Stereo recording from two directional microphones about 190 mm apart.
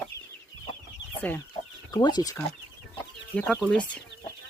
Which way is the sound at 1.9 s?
20° left (ahead or behind).